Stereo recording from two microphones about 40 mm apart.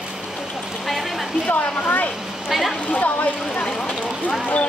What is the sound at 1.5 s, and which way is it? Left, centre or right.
Speech, left.